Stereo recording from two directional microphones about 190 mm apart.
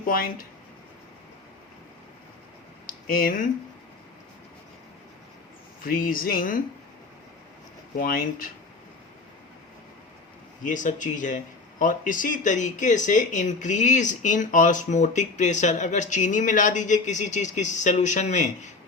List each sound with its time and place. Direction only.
0.1 s speech: 50° left (ahead or behind)
2.8 s a sound: 50° left (ahead or behind)
5.8 s speech: 50° left (ahead or behind)
7.9 s speech: 50° left (ahead or behind)
10.6 s speech: 40° left (ahead or behind)